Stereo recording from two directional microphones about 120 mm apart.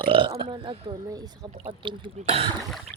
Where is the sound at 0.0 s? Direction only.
45° right (ahead or behind).